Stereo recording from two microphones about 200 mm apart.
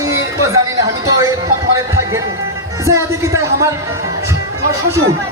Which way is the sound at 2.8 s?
15° right (ahead or behind).